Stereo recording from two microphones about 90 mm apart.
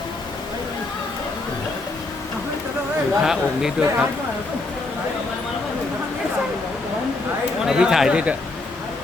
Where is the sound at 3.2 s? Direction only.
5° right (ahead or behind).